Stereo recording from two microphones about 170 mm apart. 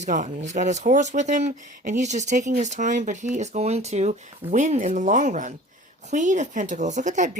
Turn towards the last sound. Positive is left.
turn(degrees=-45)  # may be behind; listen again after turning